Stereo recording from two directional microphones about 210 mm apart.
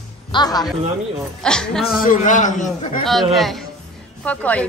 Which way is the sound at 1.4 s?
5° left (ahead or behind).